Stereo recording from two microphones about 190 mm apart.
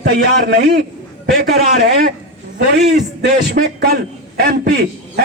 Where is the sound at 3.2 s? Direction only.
55° right (ahead or behind).